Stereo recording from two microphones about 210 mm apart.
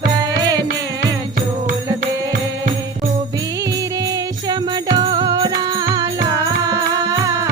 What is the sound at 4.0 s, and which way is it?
Music, 20° right (ahead or behind).